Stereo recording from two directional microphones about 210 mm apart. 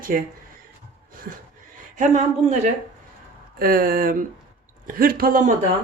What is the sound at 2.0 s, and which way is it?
Speech, 35° right (ahead or behind).